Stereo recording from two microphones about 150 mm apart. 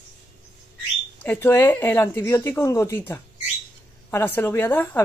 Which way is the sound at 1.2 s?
15° left (ahead or behind).